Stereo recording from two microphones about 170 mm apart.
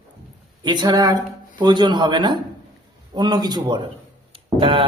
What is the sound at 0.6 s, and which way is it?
A man's voice, 25° right (ahead or behind).